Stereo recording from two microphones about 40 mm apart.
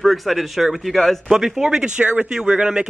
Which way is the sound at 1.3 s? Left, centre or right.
Centre.